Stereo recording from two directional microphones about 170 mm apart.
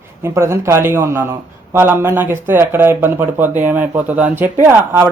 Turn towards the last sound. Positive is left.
turn(degrees=-10)  # may be behind; listen again after turning